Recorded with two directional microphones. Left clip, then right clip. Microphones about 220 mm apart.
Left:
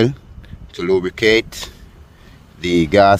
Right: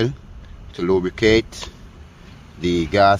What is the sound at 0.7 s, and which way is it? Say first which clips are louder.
Speech: left 2 dB; 35° left (ahead or behind).